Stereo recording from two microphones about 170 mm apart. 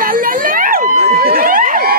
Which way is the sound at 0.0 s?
55° right (ahead or behind).